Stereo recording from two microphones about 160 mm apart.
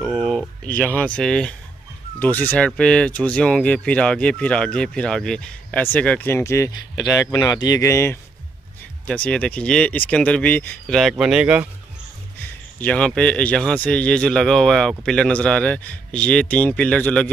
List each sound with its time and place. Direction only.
0.0 s a sound: centre (ahead or behind)
0.7 s a man's voice: 10° left (ahead or behind); by 11.7 s 5° right (ahead or behind)
12.4 s a man's voice: 10° left (ahead or behind)